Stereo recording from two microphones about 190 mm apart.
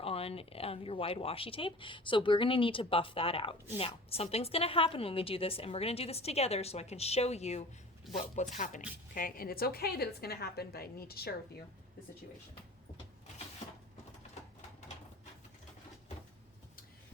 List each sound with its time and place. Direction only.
0.0 s a woman's voice: 30° left (ahead or behind); by 11.6 s 55° left (ahead or behind)